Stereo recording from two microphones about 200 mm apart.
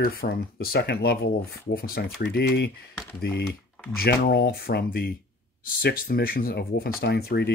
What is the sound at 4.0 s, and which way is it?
Speech, 50° left (ahead or behind).